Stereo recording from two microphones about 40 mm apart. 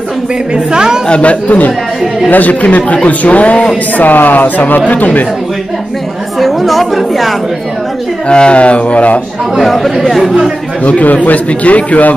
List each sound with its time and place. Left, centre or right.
0.7 s a woman's voice: centre
1.2 s a man's voice: left
3.9 s a woman's voice: left
6.4 s speech: centre
8.3 s a man's voice: left
9.6 s speech: centre
10.8 s a man's voice: left